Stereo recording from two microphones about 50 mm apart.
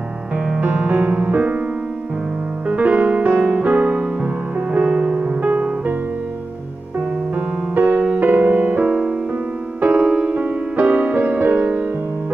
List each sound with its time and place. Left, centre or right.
0.5 s music: right
2.7 s music: right
5.5 s music: right
7.7 s music: right